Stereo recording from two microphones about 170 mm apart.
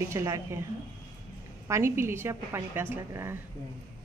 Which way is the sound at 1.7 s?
15° right (ahead or behind).